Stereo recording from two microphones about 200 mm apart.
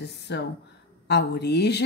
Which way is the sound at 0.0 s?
55° left (ahead or behind).